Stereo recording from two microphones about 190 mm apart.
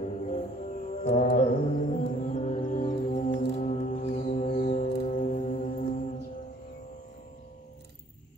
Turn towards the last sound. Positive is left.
turn(degrees=40)  # may be behind; listen again after turning